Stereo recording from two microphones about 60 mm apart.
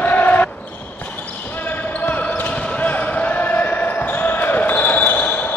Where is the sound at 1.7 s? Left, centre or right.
Left.